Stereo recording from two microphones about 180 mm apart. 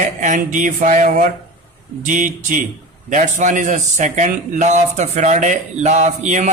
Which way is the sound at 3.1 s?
45° right (ahead or behind).